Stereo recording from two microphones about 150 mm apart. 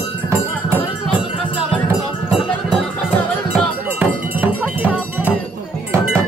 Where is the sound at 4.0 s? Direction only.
10° right (ahead or behind).